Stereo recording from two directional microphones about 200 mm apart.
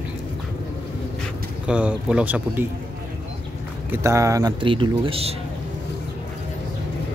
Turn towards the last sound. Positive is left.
turn(degrees=-30)  # may be behind; listen again after turning